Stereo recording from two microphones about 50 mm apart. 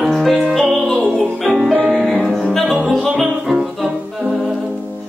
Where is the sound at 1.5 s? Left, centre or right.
Centre.